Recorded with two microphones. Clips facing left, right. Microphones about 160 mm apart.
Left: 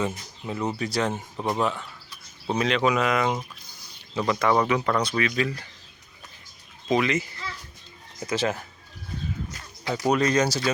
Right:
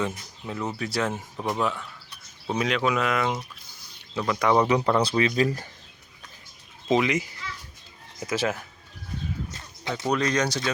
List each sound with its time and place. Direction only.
0.0 s speech: 10° left (ahead or behind)
1.4 s speech: 15° left (ahead or behind)
2.5 s speech: 5° right (ahead or behind)
4.4 s speech: 15° right (ahead or behind)
4.7 s speech: 30° right (ahead or behind)
6.9 s speech: 15° right (ahead or behind)
9.5 s bird: 25° right (ahead or behind)
10.1 s speech: 5° left (ahead or behind)